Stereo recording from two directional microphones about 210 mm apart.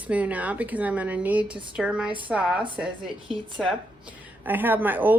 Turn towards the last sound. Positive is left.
turn(degrees=-10)  # may be behind; listen again after turning